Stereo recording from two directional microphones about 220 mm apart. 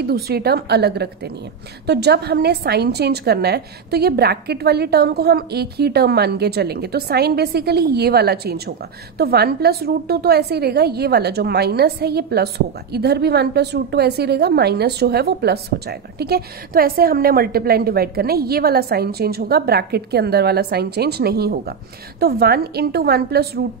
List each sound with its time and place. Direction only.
0.0 s a woman's voice: 45° right (ahead or behind)